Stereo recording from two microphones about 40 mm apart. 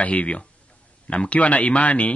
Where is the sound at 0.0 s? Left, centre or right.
Left.